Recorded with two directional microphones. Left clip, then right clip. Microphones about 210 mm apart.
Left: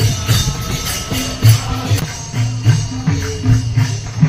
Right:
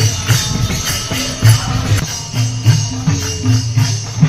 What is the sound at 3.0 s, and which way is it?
Music, centre (ahead or behind).